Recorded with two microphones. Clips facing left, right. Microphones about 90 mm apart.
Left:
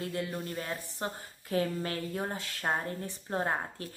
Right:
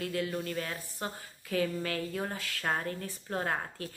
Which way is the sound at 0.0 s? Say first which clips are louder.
Right 2 dB; 25° left (ahead or behind).